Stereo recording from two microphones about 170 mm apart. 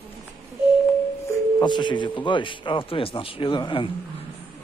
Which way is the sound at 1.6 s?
25° left (ahead or behind).